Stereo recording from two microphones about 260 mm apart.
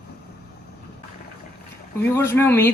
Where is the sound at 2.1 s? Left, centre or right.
Centre.